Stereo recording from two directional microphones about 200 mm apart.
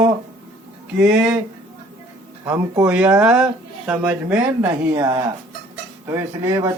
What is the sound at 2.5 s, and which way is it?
Speech, 10° right (ahead or behind).